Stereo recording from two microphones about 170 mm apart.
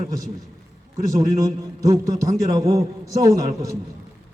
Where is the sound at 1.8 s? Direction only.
20° right (ahead or behind).